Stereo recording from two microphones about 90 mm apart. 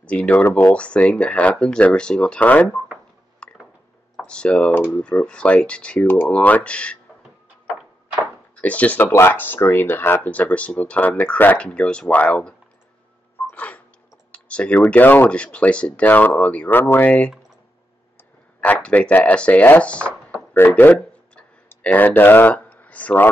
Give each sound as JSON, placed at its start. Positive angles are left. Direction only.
{"t": 0.0, "sound": "speech", "side_deg": 15}
{"t": 3.4, "sound": "a sound", "side_deg": 10}
{"t": 4.3, "sound": "speech", "side_deg": 10}
{"t": 8.5, "sound": "speech", "side_deg": 15}
{"t": 13.5, "sound": "a sound", "side_deg": 15}
{"t": 14.3, "sound": "typing", "side_deg": 15}
{"t": 14.9, "sound": "speech", "side_deg": 20}
{"t": 18.6, "sound": "speech", "side_deg": 15}